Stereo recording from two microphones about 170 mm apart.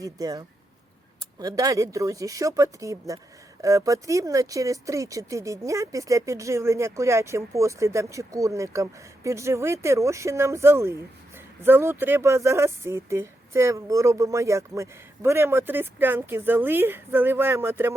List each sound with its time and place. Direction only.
0.0 s speech: 20° right (ahead or behind)